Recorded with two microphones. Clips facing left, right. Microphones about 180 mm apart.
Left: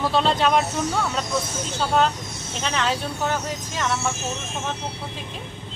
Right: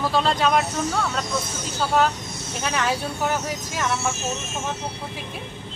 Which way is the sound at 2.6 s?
10° right (ahead or behind).